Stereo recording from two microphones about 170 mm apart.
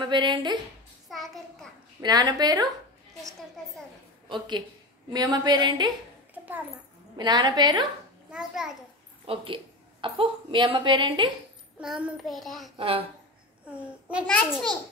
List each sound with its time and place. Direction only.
0.0 s a woman's voice: 25° right (ahead or behind)
1.0 s a child's voice: centre (ahead or behind)
2.0 s a woman's voice: 25° right (ahead or behind)
4.3 s a woman's voice: 25° right (ahead or behind)
7.2 s a woman's voice: 25° right (ahead or behind)
8.3 s a child's voice: 5° right (ahead or behind)
9.2 s a woman's voice: 30° right (ahead or behind)
11.8 s a child's voice: 5° right (ahead or behind)
12.7 s speech: 35° right (ahead or behind)
13.7 s a child's voice: 5° right (ahead or behind)
14.2 s a child's voice: 10° left (ahead or behind)